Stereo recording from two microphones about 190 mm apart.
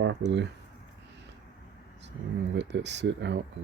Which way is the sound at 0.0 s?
65° right (ahead or behind).